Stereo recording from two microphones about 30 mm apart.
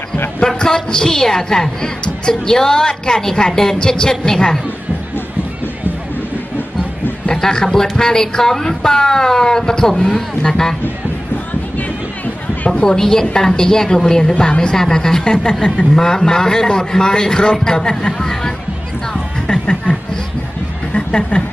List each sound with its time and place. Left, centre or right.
0.4 s a woman's voice: left
7.5 s a woman's voice: centre
13.0 s a woman's voice: centre
15.2 s a woman's voice: left
19.5 s a sound: left